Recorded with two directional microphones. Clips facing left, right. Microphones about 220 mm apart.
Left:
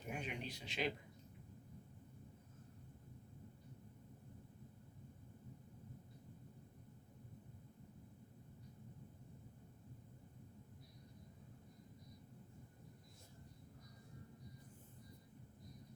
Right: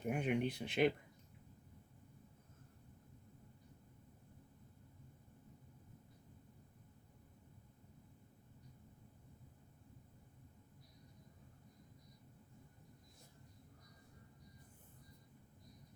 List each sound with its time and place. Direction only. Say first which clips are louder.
0.0 s speech: right 10 dB; 55° right (ahead or behind)